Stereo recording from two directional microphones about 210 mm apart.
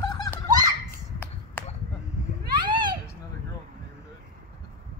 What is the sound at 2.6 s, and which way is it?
Children playing, 20° right (ahead or behind).